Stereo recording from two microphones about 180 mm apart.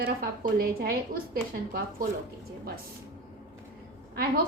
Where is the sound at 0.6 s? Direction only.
55° right (ahead or behind).